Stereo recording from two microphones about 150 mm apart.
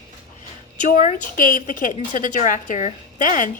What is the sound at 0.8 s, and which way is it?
A woman's voice, 55° left (ahead or behind).